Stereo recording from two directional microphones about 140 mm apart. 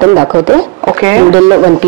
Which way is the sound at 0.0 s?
30° right (ahead or behind).